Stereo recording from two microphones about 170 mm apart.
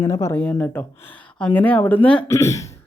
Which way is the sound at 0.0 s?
20° left (ahead or behind).